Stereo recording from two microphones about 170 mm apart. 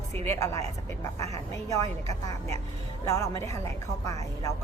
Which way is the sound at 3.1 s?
20° left (ahead or behind).